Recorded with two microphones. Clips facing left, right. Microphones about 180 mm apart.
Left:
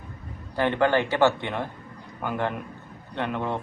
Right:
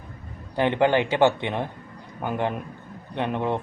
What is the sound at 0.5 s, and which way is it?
A man's voice, 20° right (ahead or behind).